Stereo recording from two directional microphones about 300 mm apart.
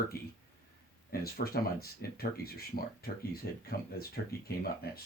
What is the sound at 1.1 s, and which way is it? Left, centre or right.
Speech, left.